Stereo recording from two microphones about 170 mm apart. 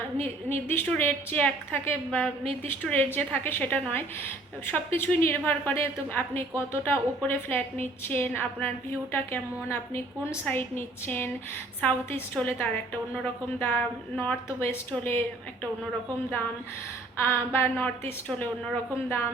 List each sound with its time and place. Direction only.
0.4 s a woman's voice: 10° left (ahead or behind)
17.2 s a woman's voice: 15° left (ahead or behind)